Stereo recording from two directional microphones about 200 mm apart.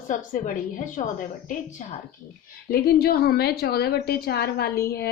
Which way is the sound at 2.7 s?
50° left (ahead or behind).